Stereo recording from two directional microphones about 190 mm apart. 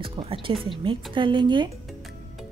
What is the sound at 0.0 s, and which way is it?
A woman's voice, 30° right (ahead or behind).